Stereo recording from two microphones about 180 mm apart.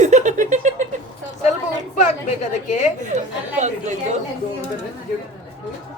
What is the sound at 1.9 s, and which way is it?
Speech, 40° left (ahead or behind).